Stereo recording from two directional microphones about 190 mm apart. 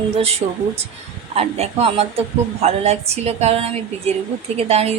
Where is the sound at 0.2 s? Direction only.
30° right (ahead or behind).